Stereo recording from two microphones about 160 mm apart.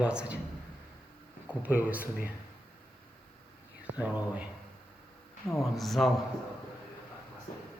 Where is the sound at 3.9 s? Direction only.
10° right (ahead or behind).